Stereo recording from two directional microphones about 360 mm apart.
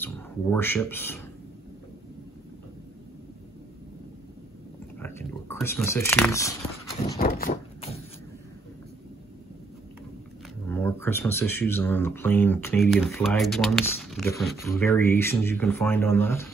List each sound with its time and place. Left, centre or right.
0.0 s speech: centre
5.0 s speech: centre
7.2 s a sound: left
10.7 s speech: centre